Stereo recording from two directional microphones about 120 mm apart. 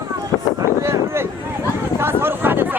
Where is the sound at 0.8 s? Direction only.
20° right (ahead or behind).